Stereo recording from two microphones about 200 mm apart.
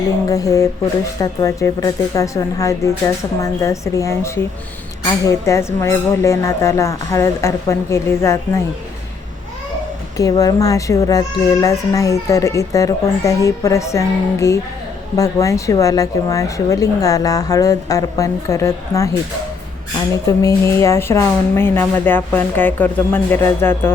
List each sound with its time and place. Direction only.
0.3 s a child's voice: 15° left (ahead or behind)
10.2 s a child's voice: 20° left (ahead or behind)
20.2 s a child's voice: 15° left (ahead or behind)